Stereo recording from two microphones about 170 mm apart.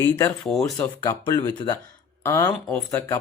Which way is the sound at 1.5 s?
25° left (ahead or behind).